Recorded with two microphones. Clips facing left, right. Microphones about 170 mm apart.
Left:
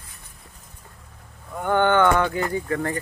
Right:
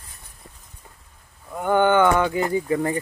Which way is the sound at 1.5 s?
10° right (ahead or behind).